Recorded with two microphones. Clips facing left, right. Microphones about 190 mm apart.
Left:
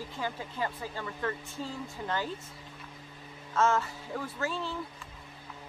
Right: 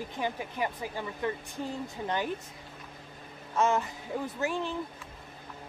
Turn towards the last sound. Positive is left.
turn(degrees=-15)  # may be behind; listen again after turning